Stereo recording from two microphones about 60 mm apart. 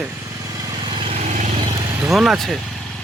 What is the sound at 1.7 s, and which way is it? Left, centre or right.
Vehicle, right.